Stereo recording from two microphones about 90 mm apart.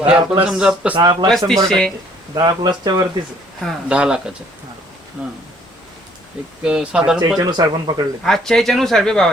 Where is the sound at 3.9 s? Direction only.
10° right (ahead or behind).